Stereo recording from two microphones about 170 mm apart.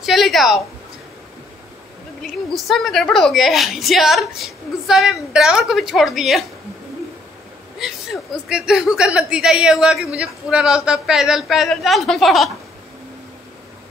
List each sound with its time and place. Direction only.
0.0 s a woman's voice: centre (ahead or behind)
2.5 s a woman's voice: centre (ahead or behind)
7.8 s a woman's voice: 5° right (ahead or behind)